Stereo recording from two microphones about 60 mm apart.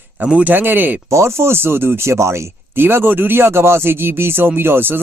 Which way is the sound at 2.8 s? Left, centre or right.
Right.